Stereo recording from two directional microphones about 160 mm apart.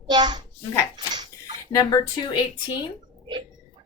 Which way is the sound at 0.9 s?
25° right (ahead or behind).